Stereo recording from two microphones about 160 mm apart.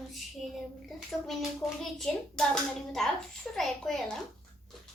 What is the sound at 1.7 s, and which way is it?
A child's voice, 5° left (ahead or behind).